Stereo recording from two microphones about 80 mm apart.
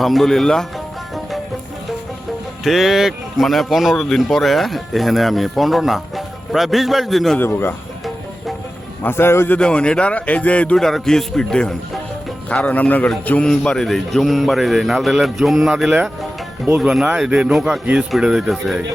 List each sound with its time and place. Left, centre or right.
0.0 s speech: centre
2.6 s speech: centre
7.3 s a man's voice: left
9.0 s a man's voice: left
9.6 s speech: centre